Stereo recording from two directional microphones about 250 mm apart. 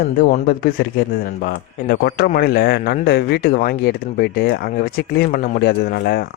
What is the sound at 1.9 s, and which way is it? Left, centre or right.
Speech, left.